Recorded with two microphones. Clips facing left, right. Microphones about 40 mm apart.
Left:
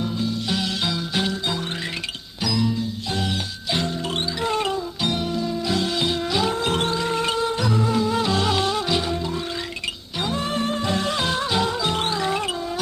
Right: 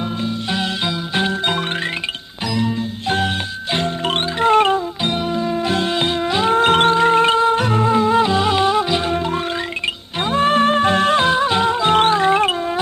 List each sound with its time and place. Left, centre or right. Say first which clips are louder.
1.1 s music: right 5 dB; right
2.6 s music: right 4 dB; right
8.3 s music: right 6 dB; right
9.0 s music: right 5 dB; right
11.3 s music: right 7 dB; right